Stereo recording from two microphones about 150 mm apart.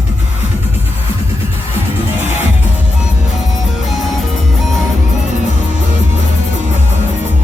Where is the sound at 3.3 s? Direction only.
Centre (ahead or behind).